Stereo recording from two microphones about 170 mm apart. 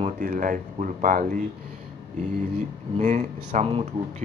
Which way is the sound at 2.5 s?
45° right (ahead or behind).